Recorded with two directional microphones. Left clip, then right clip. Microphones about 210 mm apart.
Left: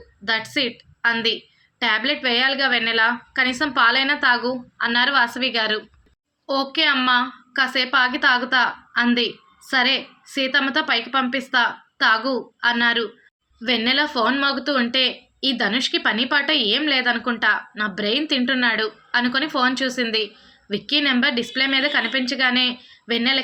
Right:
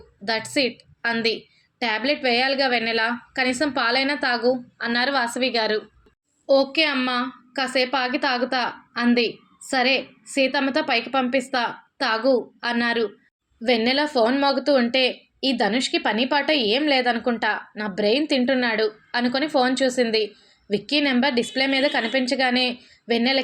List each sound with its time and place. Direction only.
0.3 s a woman's voice: 15° right (ahead or behind)